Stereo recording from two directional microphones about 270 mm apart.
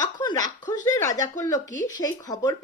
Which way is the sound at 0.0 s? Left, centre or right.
Centre.